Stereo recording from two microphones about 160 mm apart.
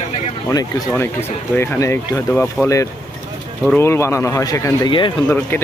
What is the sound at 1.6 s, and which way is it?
Speech, 15° left (ahead or behind).